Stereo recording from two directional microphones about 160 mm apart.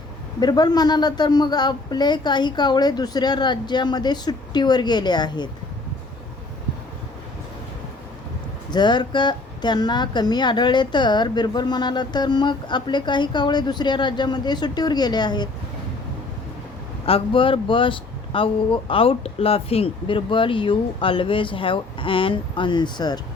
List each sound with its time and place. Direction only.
0.3 s a woman's voice: 25° left (ahead or behind)
8.7 s a woman's voice: 25° left (ahead or behind)
17.1 s speech: 35° left (ahead or behind)